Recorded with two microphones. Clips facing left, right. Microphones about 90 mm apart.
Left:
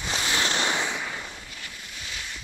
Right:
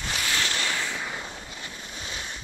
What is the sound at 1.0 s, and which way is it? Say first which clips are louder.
Fireworks: right 1 dB; 20° right (ahead or behind).